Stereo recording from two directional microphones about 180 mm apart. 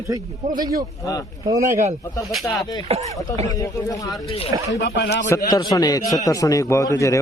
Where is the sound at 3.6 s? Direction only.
15° left (ahead or behind).